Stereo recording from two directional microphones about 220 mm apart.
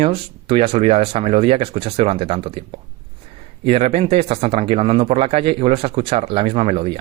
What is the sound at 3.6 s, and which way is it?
Speech, 25° right (ahead or behind).